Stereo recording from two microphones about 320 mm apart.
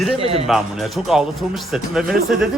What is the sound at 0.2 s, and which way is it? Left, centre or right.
Speech, centre.